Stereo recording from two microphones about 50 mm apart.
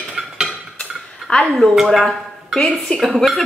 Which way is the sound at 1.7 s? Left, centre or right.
Centre.